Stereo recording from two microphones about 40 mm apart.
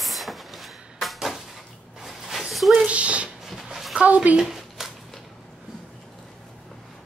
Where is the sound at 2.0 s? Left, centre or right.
Centre.